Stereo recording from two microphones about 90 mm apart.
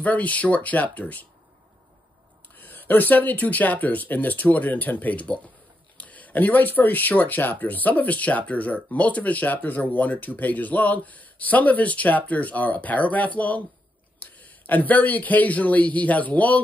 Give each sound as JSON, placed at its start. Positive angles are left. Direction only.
{"t": 0.0, "sound": "speech", "side_deg": 15}
{"t": 2.5, "sound": "speech", "side_deg": 20}